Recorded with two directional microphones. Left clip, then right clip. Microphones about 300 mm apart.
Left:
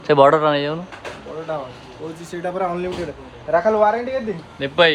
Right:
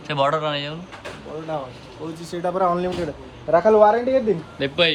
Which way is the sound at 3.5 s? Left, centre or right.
Centre.